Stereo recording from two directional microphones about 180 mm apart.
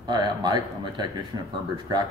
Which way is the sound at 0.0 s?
25° right (ahead or behind).